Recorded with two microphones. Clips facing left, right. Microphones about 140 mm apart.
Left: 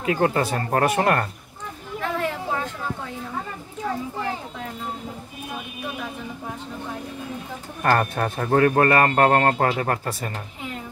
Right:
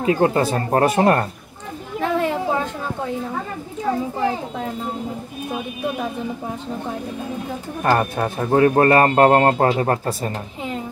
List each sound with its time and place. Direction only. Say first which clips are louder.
0.0 s a man's voice: right 4 dB; 25° right (ahead or behind)
2.0 s children playing: right 6 dB; 20° right (ahead or behind)
7.8 s speech: right 2 dB; 15° right (ahead or behind)
8.6 s a man's voice: right 5 dB; 30° right (ahead or behind)